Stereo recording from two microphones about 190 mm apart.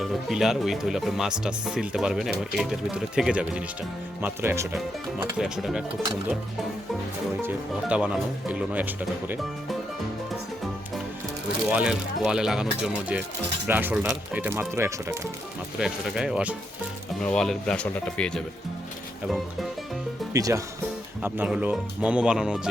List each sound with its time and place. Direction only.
0.0 s speech: centre (ahead or behind)
5.4 s speech: centre (ahead or behind)
7.4 s speech: 5° right (ahead or behind)
11.7 s speech: 5° right (ahead or behind)
15.8 s speech: 5° right (ahead or behind)
20.3 s speech: 15° right (ahead or behind)